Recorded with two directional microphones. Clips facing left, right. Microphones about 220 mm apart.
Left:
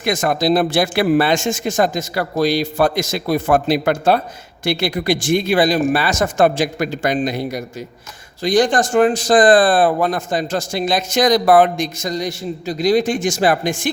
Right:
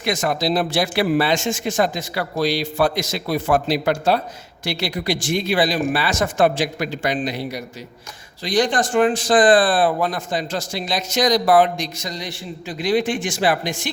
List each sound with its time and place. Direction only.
0.0 s speech: 50° left (ahead or behind)